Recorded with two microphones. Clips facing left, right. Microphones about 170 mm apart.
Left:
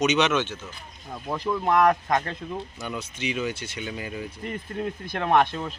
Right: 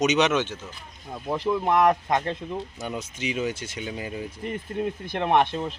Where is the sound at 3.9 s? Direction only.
30° right (ahead or behind).